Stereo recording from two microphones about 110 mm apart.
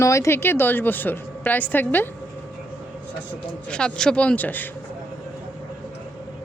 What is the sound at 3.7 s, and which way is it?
A woman's voice, 5° left (ahead or behind).